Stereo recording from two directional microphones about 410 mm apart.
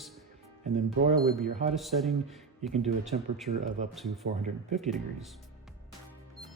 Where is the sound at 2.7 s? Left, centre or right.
Centre.